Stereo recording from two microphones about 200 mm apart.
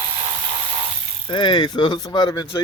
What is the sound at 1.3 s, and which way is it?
Speech, 20° left (ahead or behind).